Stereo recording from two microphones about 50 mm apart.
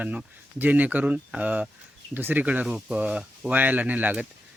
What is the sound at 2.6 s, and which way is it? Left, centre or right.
Speech, centre.